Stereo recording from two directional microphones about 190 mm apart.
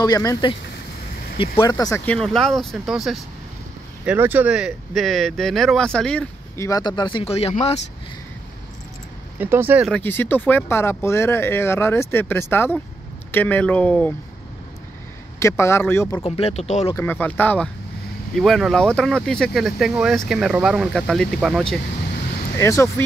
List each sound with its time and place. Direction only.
0.0 s speech: 20° left (ahead or behind)
9.4 s speech: 10° right (ahead or behind)
9.8 s speech: 10° left (ahead or behind)
15.3 s speech: 15° left (ahead or behind)
16.3 s speech: 30° left (ahead or behind)
16.9 s speech: 10° left (ahead or behind)
22.6 s speech: 15° left (ahead or behind)